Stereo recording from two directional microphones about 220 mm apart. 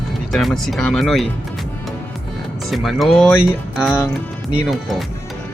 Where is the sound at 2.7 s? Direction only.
Centre (ahead or behind).